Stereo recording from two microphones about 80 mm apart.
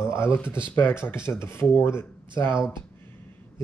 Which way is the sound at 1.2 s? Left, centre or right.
Left.